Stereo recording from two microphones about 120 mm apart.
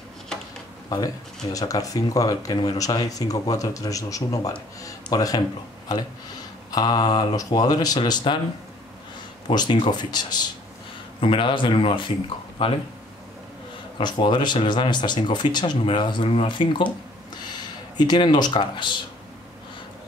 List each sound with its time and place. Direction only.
0.8 s speech: 30° left (ahead or behind)
6.7 s speech: 35° left (ahead or behind)
9.5 s a man's voice: 35° left (ahead or behind)
13.9 s speech: 40° left (ahead or behind)